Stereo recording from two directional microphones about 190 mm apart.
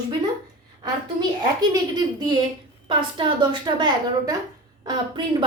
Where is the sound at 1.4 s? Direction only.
20° right (ahead or behind).